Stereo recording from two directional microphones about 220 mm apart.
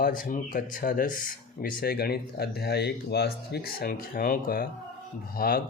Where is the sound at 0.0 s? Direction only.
40° left (ahead or behind).